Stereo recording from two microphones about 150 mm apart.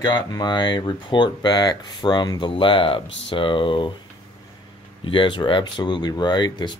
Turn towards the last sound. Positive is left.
turn(degrees=30)  # may be behind; listen again after turning